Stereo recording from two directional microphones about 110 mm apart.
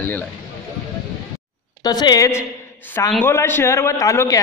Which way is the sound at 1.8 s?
40° left (ahead or behind).